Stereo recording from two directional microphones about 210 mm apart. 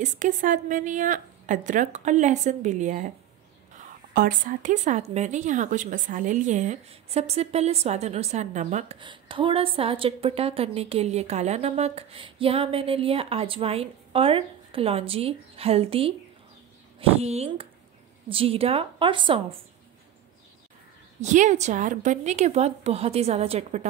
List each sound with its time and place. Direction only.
0.0 s a woman's voice: 35° right (ahead or behind)
21.2 s a woman's voice: 35° right (ahead or behind)